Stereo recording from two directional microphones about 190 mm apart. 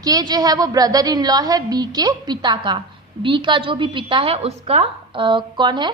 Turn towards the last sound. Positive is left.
turn(degrees=-25)  # may be behind; listen again after turning